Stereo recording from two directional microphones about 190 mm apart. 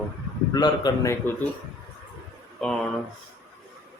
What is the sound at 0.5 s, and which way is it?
Speech, 20° left (ahead or behind).